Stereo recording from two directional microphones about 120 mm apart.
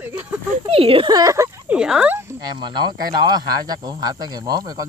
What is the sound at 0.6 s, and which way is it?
Speech, 50° right (ahead or behind).